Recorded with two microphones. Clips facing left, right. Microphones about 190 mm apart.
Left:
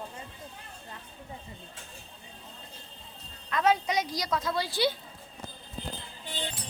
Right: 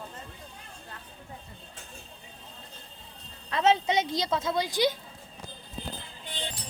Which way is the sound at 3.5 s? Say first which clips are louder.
Right 2 dB; 25° right (ahead or behind).